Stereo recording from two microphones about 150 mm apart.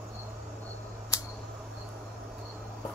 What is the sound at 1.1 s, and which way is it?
Cricket, 20° left (ahead or behind).